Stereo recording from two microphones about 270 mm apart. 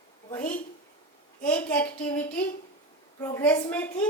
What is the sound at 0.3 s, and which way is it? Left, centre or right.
A child's voice, centre.